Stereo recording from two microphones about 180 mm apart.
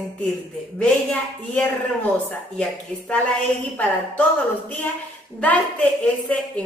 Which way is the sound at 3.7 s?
10° left (ahead or behind).